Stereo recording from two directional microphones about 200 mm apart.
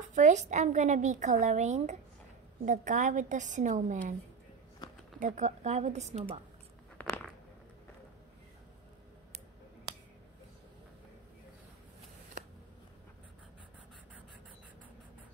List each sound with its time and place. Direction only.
0.1 s a woman's voice: 35° right (ahead or behind)
5.2 s a woman's voice: 35° right (ahead or behind)
7.0 s a sound: 5° left (ahead or behind)